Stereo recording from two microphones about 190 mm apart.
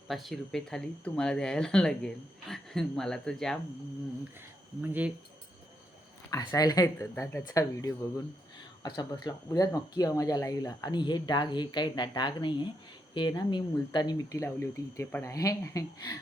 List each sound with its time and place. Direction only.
0.1 s speech: centre (ahead or behind)
4.8 s speech: 10° right (ahead or behind)
6.3 s speech: 20° left (ahead or behind)
9.0 s speech: 20° left (ahead or behind)